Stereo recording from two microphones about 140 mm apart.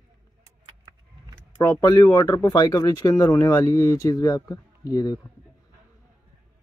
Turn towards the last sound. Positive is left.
turn(degrees=25)  # may be behind; listen again after turning